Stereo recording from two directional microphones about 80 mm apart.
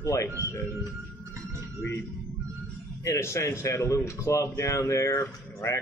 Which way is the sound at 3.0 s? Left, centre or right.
Left.